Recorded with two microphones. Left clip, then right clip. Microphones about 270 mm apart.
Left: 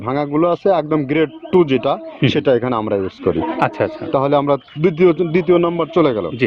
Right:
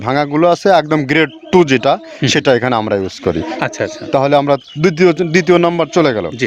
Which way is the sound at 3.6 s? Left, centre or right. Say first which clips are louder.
Left 3 dB; centre.